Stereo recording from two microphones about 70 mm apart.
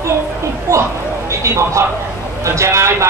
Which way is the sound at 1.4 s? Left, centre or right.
Right.